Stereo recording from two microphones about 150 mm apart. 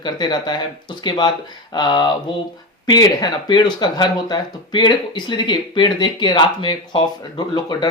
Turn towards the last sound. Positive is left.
turn(degrees=30)  # may be behind; listen again after turning